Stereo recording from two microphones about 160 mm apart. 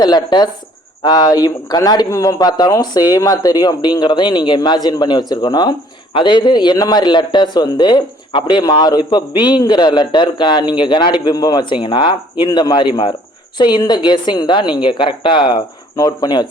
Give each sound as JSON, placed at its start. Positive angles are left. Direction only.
{"t": 0.0, "sound": "a man's voice", "side_deg": 25}